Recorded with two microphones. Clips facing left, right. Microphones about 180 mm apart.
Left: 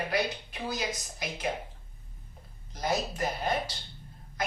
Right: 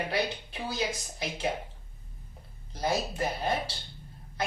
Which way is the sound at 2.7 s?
30° right (ahead or behind).